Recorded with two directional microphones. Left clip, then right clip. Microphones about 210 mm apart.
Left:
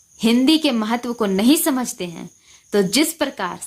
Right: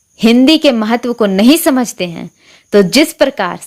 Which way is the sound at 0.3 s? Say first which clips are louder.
Right 8 dB; 30° right (ahead or behind).